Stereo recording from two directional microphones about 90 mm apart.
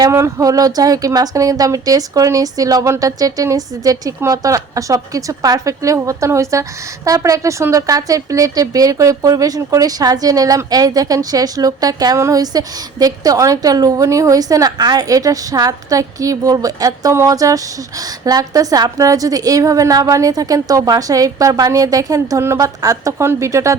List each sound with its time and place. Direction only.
0.1 s a woman's voice: 35° right (ahead or behind)